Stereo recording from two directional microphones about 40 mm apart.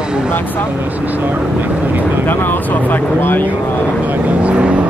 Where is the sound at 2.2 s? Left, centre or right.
Left.